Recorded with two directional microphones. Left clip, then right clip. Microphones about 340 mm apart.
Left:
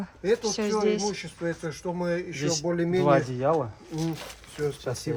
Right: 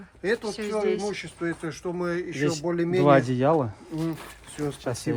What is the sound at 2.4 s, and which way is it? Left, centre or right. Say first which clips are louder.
Speech: right 2 dB; right.